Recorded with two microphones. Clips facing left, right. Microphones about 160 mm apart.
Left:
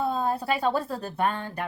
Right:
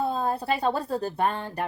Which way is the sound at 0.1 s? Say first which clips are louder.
Even; 35° right (ahead or behind).